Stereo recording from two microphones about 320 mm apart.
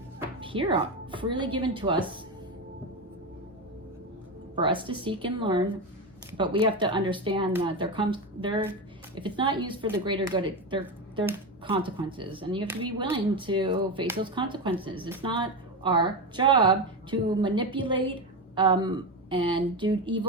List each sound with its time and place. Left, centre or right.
0.2 s a woman's voice: centre
4.5 s speech: centre